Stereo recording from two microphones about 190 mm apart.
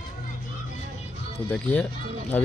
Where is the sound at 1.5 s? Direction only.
5° left (ahead or behind).